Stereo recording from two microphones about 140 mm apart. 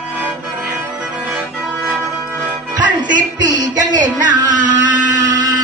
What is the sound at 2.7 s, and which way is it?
Music, 30° right (ahead or behind).